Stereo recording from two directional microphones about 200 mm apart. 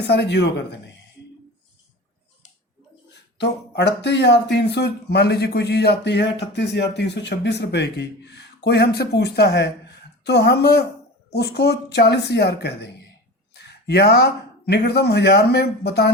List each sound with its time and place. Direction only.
0.1 s speech: 55° left (ahead or behind)
3.3 s a woman's voice: 60° left (ahead or behind)